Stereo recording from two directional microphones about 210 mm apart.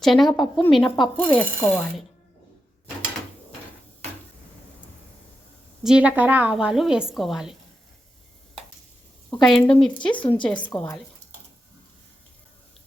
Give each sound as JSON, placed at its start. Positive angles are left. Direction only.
{"t": 0.0, "sound": "speech", "side_deg": 0}
{"t": 5.8, "sound": "speech", "side_deg": -5}
{"t": 9.3, "sound": "speech", "side_deg": 5}
{"t": 10.1, "sound": "a woman's voice", "side_deg": 25}